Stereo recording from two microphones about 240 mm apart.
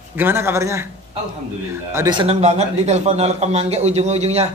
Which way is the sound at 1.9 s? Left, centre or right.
Centre.